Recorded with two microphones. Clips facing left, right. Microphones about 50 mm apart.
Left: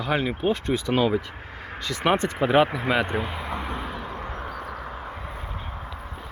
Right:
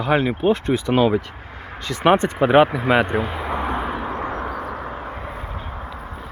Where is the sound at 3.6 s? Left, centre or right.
Right.